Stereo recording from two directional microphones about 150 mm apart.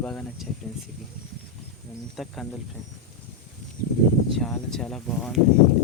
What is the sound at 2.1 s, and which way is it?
Speech, centre (ahead or behind).